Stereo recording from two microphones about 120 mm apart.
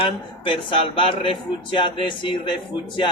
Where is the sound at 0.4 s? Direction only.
45° left (ahead or behind).